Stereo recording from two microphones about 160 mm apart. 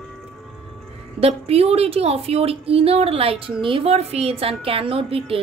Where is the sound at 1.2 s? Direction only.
40° right (ahead or behind).